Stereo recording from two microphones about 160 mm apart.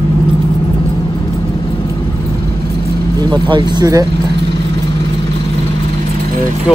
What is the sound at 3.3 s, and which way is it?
Speech, 30° right (ahead or behind).